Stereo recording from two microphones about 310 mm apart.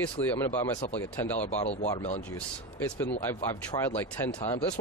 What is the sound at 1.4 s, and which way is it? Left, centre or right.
Speech, left.